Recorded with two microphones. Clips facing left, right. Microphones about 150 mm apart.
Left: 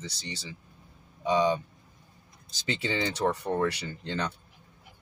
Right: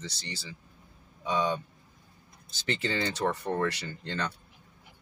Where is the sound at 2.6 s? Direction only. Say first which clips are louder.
Left 1 dB; 15° left (ahead or behind).